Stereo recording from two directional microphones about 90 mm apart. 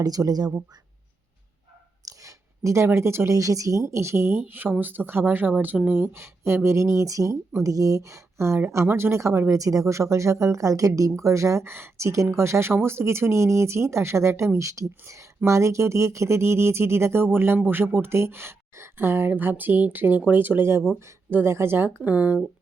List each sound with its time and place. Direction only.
0.0 s speech: 45° right (ahead or behind)
2.0 s speech: 35° right (ahead or behind); by 22.4 s 20° right (ahead or behind)